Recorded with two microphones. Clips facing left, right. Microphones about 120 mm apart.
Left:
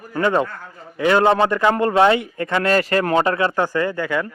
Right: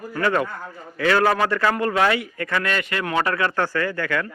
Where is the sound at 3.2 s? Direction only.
25° left (ahead or behind).